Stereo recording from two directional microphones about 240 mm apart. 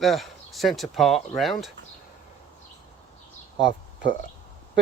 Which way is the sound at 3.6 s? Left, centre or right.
Right.